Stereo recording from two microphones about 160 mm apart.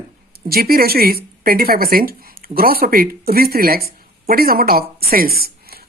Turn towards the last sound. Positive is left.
turn(degrees=-75)  # may be behind; listen again after turning